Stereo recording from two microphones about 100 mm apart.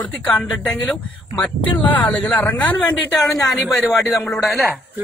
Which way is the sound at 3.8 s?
Centre (ahead or behind).